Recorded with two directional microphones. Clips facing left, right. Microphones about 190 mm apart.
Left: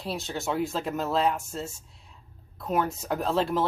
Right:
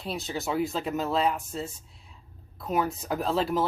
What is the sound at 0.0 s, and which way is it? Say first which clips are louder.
Speech: even; centre (ahead or behind).